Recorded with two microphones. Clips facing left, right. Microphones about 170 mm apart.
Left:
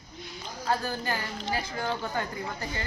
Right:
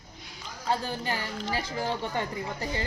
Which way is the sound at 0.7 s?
25° right (ahead or behind).